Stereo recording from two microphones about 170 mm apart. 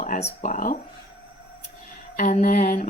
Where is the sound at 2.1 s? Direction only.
50° left (ahead or behind).